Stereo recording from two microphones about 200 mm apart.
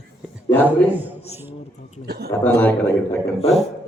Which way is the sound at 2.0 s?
55° right (ahead or behind).